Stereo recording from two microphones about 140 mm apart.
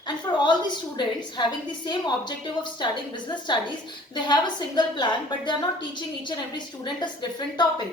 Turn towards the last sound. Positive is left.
turn(degrees=30)  # may be behind; listen again after turning